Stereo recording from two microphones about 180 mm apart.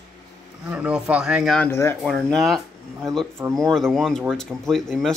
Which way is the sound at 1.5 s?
15° left (ahead or behind).